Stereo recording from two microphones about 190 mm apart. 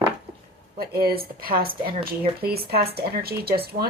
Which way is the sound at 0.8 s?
55° right (ahead or behind).